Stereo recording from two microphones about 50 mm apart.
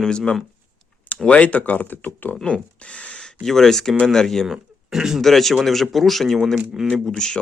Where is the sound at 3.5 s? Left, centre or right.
Centre.